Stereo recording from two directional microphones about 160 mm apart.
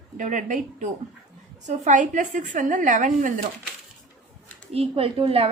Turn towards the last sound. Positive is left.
turn(degrees=-35)  # may be behind; listen again after turning